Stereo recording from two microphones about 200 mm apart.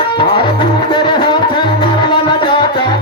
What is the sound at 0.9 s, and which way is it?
Music, 25° left (ahead or behind).